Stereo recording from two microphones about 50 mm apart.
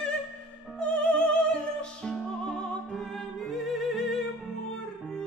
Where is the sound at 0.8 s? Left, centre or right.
Left.